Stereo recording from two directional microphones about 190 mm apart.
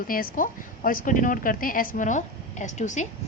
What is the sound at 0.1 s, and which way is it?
A woman's voice, 45° left (ahead or behind).